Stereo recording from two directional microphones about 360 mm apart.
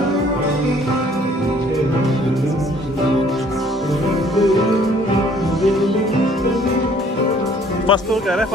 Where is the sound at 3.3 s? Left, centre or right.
Centre.